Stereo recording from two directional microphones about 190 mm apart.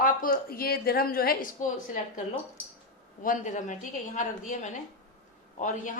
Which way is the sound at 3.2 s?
40° left (ahead or behind).